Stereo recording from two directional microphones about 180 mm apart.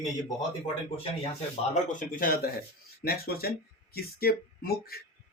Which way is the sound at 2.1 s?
50° left (ahead or behind).